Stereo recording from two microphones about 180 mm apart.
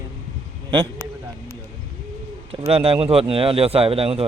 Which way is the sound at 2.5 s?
30° right (ahead or behind).